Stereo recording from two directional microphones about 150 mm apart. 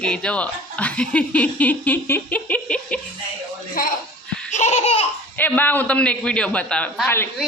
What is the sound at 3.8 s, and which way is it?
Speech, 70° left (ahead or behind).